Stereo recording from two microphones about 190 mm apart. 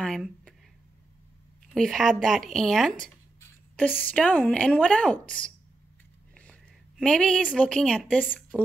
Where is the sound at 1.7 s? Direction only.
Centre (ahead or behind).